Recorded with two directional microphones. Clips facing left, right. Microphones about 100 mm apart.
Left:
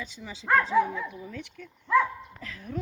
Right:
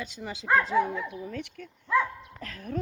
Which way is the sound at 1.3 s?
55° right (ahead or behind).